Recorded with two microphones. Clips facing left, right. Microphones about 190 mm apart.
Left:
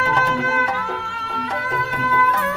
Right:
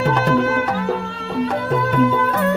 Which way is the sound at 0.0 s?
65° right (ahead or behind).